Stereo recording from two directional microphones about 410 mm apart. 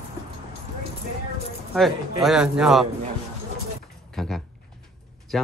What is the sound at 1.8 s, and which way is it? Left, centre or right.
A man's voice, centre.